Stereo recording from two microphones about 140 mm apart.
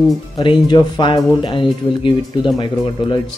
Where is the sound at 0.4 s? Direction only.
35° left (ahead or behind).